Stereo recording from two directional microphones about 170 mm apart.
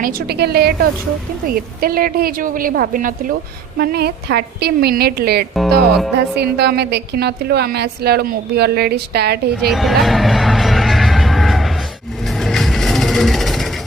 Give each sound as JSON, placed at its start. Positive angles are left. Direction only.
{"t": 0.0, "sound": "a woman's voice", "side_deg": -65}
{"t": 3.8, "sound": "a woman's voice", "side_deg": -70}
{"t": 5.5, "sound": "speech", "side_deg": 0}
{"t": 6.3, "sound": "a woman's voice", "side_deg": -75}
{"t": 9.6, "sound": "music", "side_deg": 0}